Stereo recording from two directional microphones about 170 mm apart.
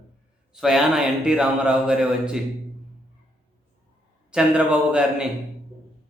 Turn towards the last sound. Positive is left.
turn(degrees=-5)  # may be behind; listen again after turning